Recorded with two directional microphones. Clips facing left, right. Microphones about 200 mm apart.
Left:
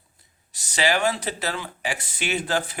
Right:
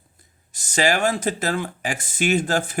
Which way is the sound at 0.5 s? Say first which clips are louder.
Right 3 dB; 50° right (ahead or behind).